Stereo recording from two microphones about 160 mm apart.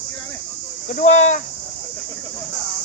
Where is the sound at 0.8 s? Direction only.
50° left (ahead or behind).